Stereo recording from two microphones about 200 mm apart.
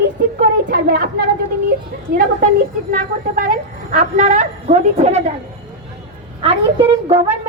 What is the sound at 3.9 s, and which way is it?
A woman's voice, 40° right (ahead or behind).